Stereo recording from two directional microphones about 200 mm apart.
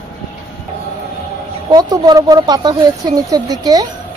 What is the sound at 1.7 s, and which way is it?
Speech, 20° right (ahead or behind).